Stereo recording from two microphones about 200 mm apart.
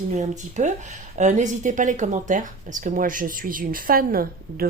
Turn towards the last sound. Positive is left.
turn(degrees=-45)  # may be behind; listen again after turning